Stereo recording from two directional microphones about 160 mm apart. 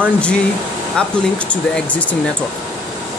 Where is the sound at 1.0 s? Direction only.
5° left (ahead or behind).